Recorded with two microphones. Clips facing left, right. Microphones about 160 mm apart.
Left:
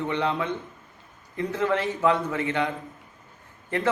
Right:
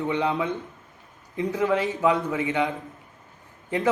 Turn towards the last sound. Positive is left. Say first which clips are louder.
# right 2 dB
turn(degrees=-15)  # may be behind; listen again after turning